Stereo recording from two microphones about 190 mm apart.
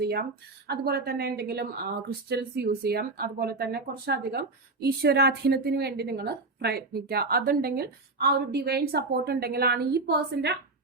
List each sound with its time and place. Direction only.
0.0 s speech: 55° right (ahead or behind)